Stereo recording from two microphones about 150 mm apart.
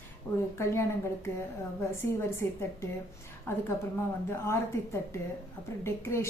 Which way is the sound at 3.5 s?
15° left (ahead or behind).